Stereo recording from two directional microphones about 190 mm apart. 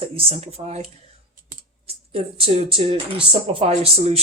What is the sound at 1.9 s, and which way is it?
Speech, 30° right (ahead or behind).